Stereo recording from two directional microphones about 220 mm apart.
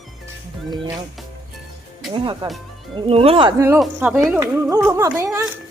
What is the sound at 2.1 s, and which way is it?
Speech, 20° right (ahead or behind).